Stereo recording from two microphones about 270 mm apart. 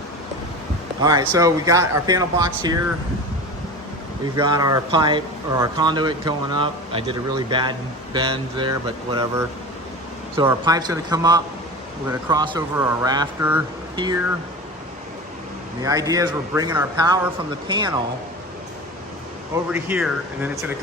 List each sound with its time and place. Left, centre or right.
1.0 s a man's voice: centre
4.4 s a man's voice: centre
15.8 s a man's voice: centre
19.7 s speech: centre